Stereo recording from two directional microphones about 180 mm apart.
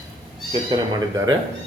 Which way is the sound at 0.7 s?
20° right (ahead or behind).